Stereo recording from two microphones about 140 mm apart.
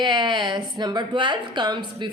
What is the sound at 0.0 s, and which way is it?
A woman's voice, 30° right (ahead or behind).